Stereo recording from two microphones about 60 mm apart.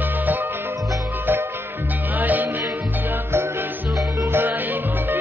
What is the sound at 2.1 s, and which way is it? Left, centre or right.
Music, right.